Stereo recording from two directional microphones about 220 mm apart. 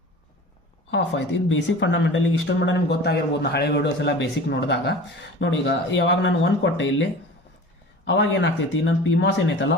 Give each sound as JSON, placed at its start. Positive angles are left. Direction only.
{"t": 0.9, "sound": "speech", "side_deg": 55}